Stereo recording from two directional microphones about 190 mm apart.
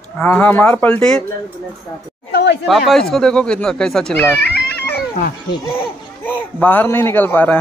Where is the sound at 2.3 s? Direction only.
65° left (ahead or behind).